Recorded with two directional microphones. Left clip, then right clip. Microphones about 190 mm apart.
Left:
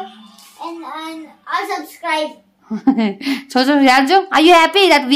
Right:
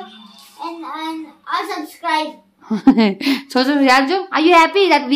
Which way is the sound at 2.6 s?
40° right (ahead or behind).